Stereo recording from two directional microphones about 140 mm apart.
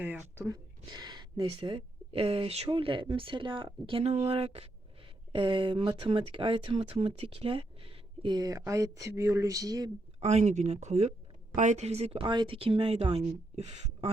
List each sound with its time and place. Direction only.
0.0 s speech: 10° right (ahead or behind)
0.4 s speech: 30° right (ahead or behind)
10.2 s speech: 55° right (ahead or behind)